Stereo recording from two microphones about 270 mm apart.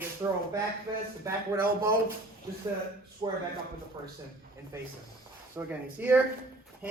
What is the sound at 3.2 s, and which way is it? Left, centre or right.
Speech, centre.